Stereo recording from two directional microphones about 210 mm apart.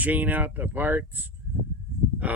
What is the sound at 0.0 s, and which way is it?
Speech, 10° right (ahead or behind).